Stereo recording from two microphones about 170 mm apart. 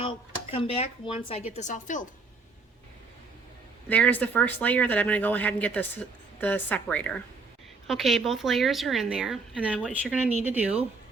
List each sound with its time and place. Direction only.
0.5 s speech: 35° left (ahead or behind)
1.5 s a woman's voice: 45° left (ahead or behind)
3.8 s a woman's voice: 10° left (ahead or behind); by 10.8 s 10° right (ahead or behind)